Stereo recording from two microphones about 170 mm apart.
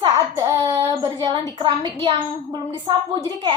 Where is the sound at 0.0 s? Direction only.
20° right (ahead or behind).